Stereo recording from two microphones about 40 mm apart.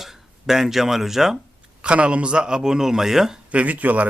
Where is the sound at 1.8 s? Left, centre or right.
Right; by 3.3 s centre.